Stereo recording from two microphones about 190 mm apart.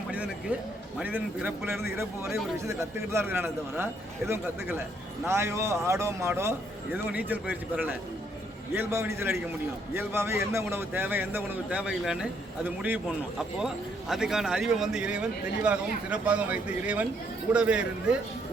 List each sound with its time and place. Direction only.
0.9 s a man's voice: 10° right (ahead or behind)
5.2 s a man's voice: 15° right (ahead or behind)